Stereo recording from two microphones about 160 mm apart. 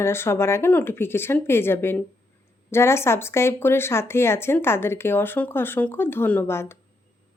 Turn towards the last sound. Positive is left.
turn(degrees=15)  # may be behind; listen again after turning